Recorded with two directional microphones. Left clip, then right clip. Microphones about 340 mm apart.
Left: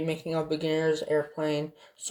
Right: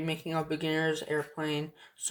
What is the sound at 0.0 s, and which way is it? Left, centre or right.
Speech, right.